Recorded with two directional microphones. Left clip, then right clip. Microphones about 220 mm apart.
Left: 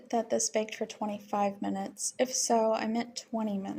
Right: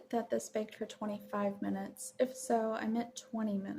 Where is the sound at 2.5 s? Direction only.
10° left (ahead or behind).